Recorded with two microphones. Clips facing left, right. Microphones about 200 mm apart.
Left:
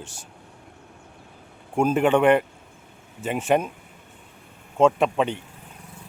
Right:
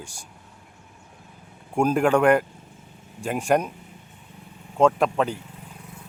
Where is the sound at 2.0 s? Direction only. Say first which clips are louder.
Left 1 dB; 5° left (ahead or behind).